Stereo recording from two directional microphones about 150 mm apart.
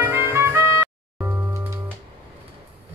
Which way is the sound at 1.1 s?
15° right (ahead or behind).